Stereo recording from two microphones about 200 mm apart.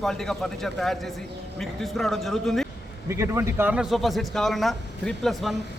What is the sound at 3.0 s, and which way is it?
A man's voice, 15° right (ahead or behind).